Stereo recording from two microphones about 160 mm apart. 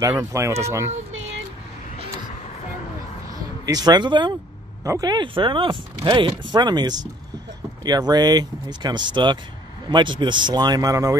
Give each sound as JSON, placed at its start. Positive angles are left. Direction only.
{"t": 0.1, "sound": "speech", "side_deg": -15}
{"t": 3.3, "sound": "speech", "side_deg": -25}